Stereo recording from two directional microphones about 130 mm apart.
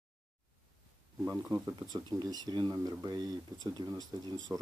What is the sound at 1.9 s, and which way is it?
Speech, 35° right (ahead or behind).